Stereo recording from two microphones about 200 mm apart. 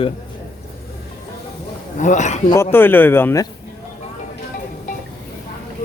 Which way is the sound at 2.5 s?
10° left (ahead or behind).